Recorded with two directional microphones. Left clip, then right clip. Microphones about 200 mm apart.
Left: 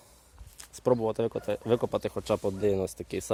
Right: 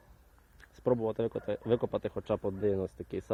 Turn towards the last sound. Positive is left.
turn(degrees=5)  # may be behind; listen again after turning